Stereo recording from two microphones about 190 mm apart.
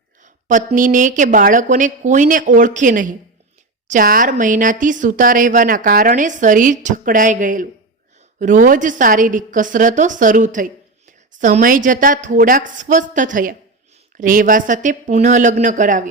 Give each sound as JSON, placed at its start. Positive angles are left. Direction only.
{"t": 0.4, "sound": "a woman's voice", "side_deg": -40}